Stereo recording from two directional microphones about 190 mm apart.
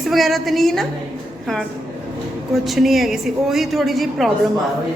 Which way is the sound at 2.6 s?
Centre (ahead or behind).